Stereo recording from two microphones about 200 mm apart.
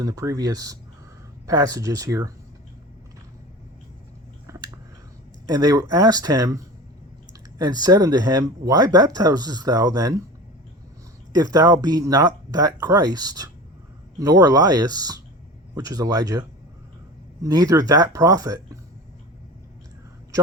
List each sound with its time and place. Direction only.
0.0 s speech: 15° right (ahead or behind)
5.5 s speech: 20° right (ahead or behind)
7.6 s speech: 20° right (ahead or behind)
11.3 s speech: 20° right (ahead or behind)